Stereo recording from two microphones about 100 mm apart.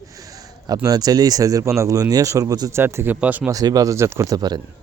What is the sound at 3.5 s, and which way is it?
Speech, 40° right (ahead or behind).